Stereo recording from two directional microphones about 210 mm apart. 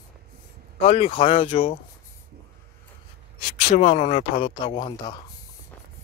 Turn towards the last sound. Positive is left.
turn(degrees=20)  # may be behind; listen again after turning